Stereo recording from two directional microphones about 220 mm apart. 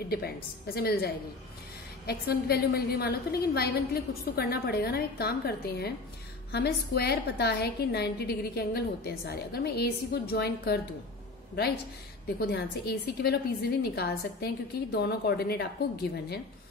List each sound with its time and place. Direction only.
0.7 s a woman's voice: 45° left (ahead or behind)